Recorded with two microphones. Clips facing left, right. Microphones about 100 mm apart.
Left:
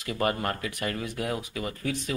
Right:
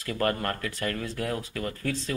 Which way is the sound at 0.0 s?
15° left (ahead or behind).